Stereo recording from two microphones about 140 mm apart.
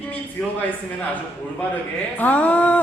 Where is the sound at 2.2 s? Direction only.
10° left (ahead or behind).